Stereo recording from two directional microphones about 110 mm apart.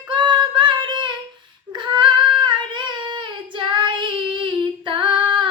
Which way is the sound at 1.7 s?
45° right (ahead or behind).